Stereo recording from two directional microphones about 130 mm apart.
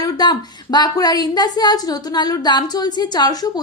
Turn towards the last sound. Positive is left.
turn(degrees=30)  # may be behind; listen again after turning